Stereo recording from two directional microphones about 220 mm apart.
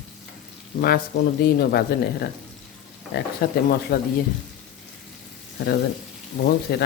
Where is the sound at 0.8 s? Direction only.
45° left (ahead or behind).